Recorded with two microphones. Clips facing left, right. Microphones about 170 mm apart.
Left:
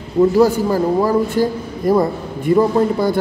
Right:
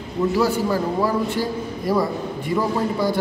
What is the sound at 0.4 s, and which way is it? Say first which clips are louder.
A man's voice: left 6 dB; 45° left (ahead or behind).